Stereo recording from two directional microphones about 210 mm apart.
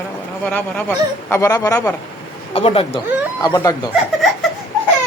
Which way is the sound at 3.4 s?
15° left (ahead or behind).